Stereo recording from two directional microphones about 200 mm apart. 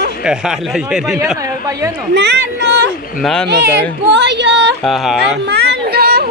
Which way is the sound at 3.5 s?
60° right (ahead or behind).